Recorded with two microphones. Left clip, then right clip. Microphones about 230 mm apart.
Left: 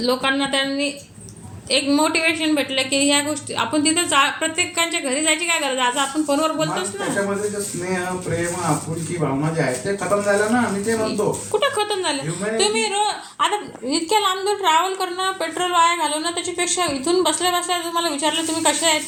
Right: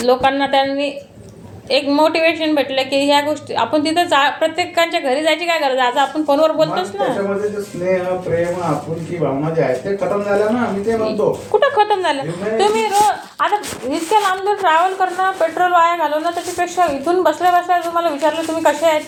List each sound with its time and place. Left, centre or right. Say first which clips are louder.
0.0 s a woman's voice: right 6 dB; left
11.5 s a woman's voice: right 7 dB; left